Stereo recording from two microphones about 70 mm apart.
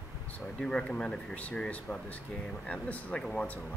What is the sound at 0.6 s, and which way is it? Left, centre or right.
Speech, centre.